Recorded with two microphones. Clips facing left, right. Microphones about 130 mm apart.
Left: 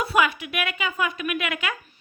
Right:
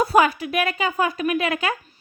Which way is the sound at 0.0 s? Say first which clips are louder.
Right 5 dB; 40° right (ahead or behind).